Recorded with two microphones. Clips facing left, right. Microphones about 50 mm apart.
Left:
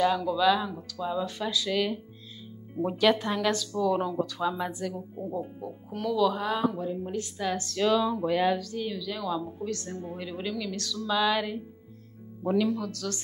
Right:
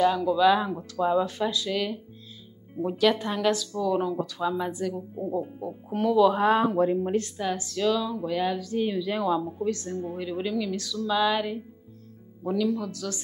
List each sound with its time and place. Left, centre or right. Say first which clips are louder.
0.0 s speech: right 3 dB; centre
0.6 s speech: right 6 dB; right
1.7 s speech: left 1 dB; centre
3.2 s speech: right 2 dB; centre
5.9 s speech: right 5 dB; centre
6.7 s speech: right 9 dB; right
7.3 s speech: right 1 dB; centre
7.7 s speech: left 2 dB; centre
8.5 s speech: right 6 dB; centre
9.8 s speech: right 5 dB; centre
12.4 s speech: even; centre
12.7 s speech: right 1 dB; centre